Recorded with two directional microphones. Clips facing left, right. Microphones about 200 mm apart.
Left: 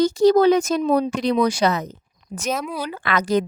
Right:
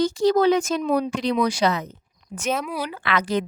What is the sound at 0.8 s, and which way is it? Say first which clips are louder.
Speech: left 3 dB; 30° left (ahead or behind).